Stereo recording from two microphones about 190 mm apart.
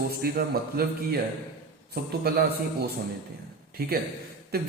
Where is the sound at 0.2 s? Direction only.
55° right (ahead or behind).